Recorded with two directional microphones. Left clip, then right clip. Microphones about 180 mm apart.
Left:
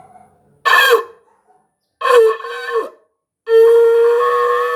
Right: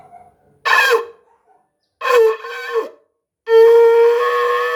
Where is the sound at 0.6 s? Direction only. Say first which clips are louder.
Left 2 dB; 15° left (ahead or behind).